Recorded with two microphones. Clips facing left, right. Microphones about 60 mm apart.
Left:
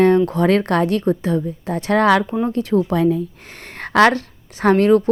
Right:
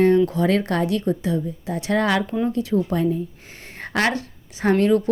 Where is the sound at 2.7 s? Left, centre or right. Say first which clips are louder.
Left 6 dB; left.